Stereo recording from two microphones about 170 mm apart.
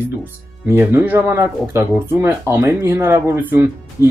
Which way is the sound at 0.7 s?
15° right (ahead or behind).